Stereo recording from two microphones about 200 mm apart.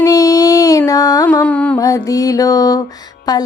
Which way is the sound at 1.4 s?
5° left (ahead or behind).